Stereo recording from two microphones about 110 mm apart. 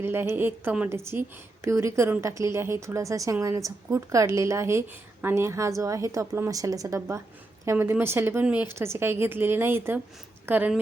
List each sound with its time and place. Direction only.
0.0 s a woman's voice: 20° right (ahead or behind)